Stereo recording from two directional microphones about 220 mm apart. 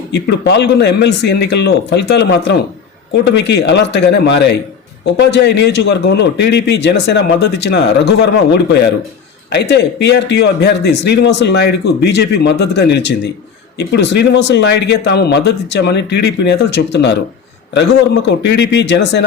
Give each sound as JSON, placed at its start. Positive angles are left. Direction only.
{"t": 0.1, "sound": "a man's voice", "side_deg": 50}